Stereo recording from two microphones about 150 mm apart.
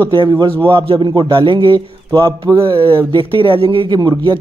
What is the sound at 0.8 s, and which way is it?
Speech, 30° right (ahead or behind).